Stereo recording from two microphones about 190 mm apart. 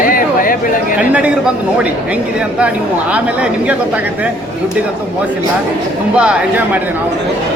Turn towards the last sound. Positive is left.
turn(degrees=-5)  # may be behind; listen again after turning